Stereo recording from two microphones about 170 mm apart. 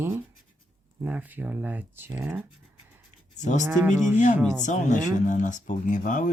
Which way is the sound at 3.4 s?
45° left (ahead or behind).